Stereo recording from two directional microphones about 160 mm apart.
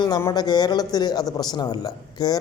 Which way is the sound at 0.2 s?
20° left (ahead or behind).